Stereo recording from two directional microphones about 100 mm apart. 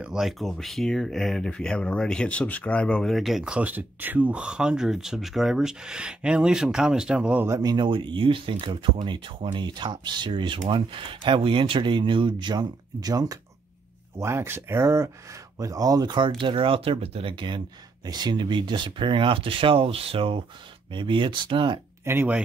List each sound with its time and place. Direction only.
0.0 s speech: 5° right (ahead or behind); by 3.1 s 10° left (ahead or behind)
3.1 s speech: centre (ahead or behind)
7.4 s speech: 35° right (ahead or behind)
7.7 s speech: 50° right (ahead or behind)
14.1 s speech: 25° right (ahead or behind); by 17.6 s 60° right (ahead or behind)
18.0 s speech: 45° right (ahead or behind); by 20.3 s 65° right (ahead or behind)
20.9 s speech: 55° right (ahead or behind)
22.0 s speech: 25° right (ahead or behind)